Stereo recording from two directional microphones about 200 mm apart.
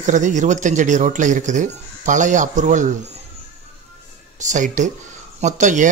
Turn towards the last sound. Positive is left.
turn(degrees=-40)  # may be behind; listen again after turning